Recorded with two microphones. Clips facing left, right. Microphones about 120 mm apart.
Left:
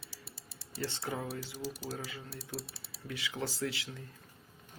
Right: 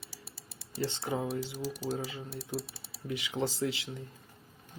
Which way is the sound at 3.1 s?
20° right (ahead or behind).